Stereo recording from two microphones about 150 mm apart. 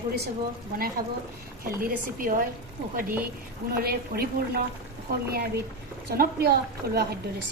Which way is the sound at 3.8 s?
90° right.